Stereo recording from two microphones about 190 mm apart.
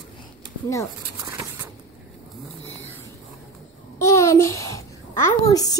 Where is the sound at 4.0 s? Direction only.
15° left (ahead or behind).